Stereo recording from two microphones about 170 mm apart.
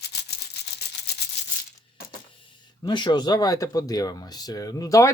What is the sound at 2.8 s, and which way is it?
Speech, 25° left (ahead or behind).